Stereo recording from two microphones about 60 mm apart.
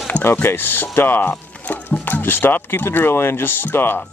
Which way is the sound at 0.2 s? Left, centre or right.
Left.